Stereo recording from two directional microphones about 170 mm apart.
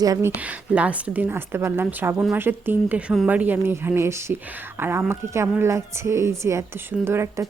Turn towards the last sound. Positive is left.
turn(degrees=-15)  # may be behind; listen again after turning